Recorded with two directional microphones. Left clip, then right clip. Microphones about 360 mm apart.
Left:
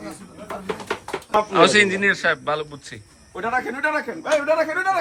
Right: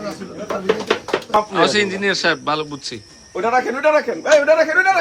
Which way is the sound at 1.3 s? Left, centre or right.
Centre.